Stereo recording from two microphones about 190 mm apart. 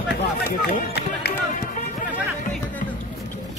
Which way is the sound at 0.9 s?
60° left (ahead or behind).